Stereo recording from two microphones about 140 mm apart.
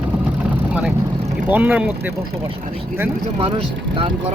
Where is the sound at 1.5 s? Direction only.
15° right (ahead or behind).